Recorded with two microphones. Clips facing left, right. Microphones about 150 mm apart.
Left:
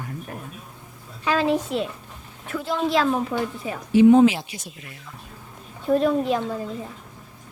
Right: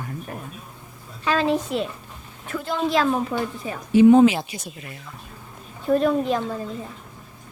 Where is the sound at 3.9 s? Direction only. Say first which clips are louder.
Right 1 dB; 50° right (ahead or behind).